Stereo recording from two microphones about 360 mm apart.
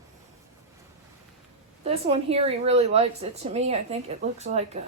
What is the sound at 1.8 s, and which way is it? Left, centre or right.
A woman's voice, centre.